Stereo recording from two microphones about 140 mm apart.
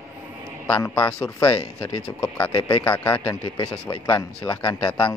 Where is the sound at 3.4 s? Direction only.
30° left (ahead or behind).